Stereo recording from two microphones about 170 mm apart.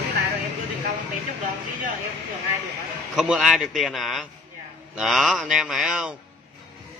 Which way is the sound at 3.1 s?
Centre (ahead or behind).